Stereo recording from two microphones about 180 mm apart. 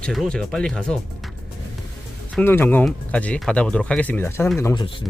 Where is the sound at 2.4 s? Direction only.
10° left (ahead or behind).